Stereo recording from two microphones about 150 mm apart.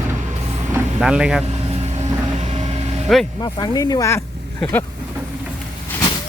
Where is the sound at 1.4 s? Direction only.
45° right (ahead or behind).